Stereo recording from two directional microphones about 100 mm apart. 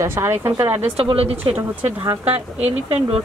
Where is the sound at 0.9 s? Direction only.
75° right (ahead or behind).